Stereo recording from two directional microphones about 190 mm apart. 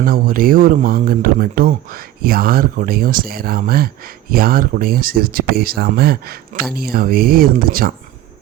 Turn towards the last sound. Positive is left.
turn(degrees=-50)  # may be behind; listen again after turning